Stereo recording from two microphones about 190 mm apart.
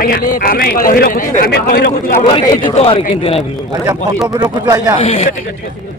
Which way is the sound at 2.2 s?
25° left (ahead or behind).